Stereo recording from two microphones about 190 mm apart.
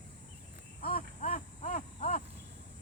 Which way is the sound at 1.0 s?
45° left (ahead or behind).